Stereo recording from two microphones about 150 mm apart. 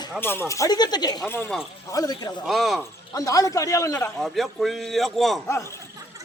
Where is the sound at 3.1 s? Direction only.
20° left (ahead or behind).